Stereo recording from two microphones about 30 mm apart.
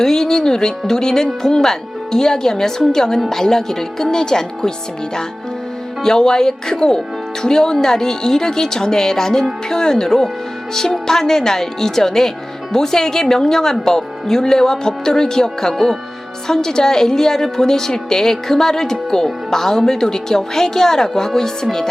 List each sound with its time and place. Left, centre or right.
0.0 s a woman's voice: centre
6.0 s a woman's voice: left